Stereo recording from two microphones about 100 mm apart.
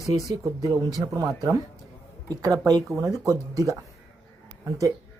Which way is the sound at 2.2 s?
35° right (ahead or behind).